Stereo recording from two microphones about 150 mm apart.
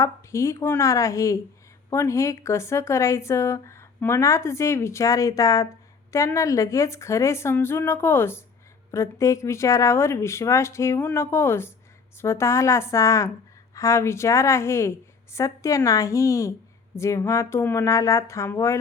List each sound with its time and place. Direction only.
0.0 s a woman's voice: 20° left (ahead or behind)